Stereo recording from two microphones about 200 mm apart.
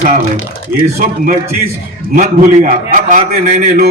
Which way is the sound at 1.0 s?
45° right (ahead or behind).